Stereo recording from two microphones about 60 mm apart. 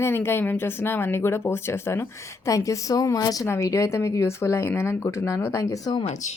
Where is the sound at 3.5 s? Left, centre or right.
Left.